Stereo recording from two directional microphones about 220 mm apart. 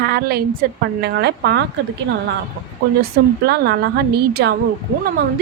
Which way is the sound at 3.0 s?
45° right (ahead or behind).